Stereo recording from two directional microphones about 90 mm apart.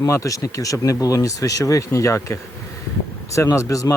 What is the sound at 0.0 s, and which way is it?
Speech, 40° left (ahead or behind).